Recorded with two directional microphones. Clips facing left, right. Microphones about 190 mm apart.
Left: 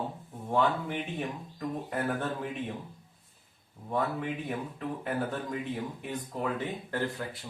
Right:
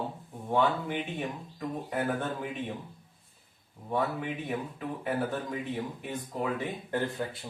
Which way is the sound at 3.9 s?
Centre (ahead or behind).